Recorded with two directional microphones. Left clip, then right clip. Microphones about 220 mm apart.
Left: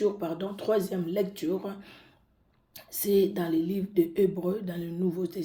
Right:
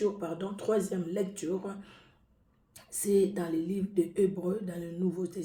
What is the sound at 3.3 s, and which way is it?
Speech, 30° left (ahead or behind).